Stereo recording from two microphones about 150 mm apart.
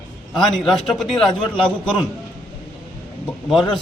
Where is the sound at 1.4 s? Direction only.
35° left (ahead or behind).